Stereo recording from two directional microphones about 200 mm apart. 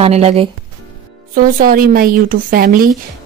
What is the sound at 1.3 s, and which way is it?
A woman's voice, 45° right (ahead or behind).